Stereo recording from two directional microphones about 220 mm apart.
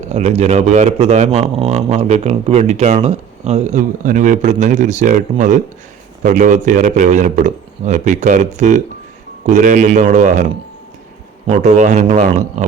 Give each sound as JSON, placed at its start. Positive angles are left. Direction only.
{"t": 0.1, "sound": "a man's voice", "side_deg": -30}